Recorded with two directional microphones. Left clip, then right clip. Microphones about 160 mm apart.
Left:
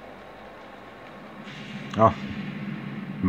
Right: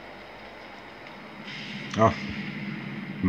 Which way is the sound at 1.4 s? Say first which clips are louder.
Right 3 dB; 50° left (ahead or behind).